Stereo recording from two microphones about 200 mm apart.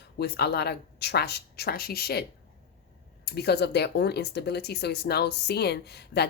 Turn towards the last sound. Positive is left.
turn(degrees=55)  # may be behind; listen again after turning